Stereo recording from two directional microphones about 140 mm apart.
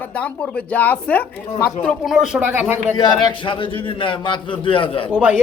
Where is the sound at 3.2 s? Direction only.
40° left (ahead or behind).